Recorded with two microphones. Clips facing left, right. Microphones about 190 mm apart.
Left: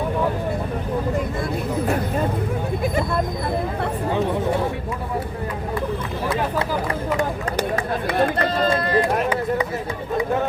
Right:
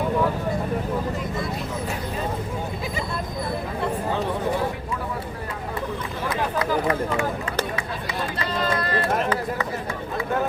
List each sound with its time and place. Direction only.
6.6 s a sound: 30° left (ahead or behind)
7.8 s run: 55° left (ahead or behind)
8.6 s run: 25° left (ahead or behind)
9.1 s run: 10° left (ahead or behind)